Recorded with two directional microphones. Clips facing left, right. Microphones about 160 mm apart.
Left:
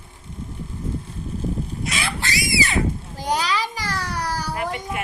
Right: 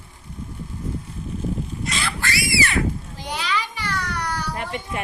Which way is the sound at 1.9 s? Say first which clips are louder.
Even; 5° left (ahead or behind).